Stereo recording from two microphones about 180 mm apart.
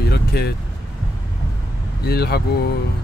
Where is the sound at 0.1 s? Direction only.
60° left (ahead or behind).